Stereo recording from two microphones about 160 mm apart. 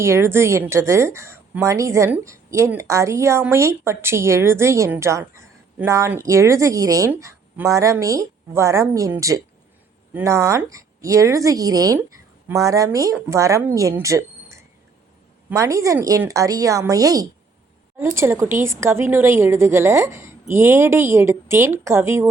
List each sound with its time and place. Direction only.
0.0 s a woman's voice: 15° right (ahead or behind)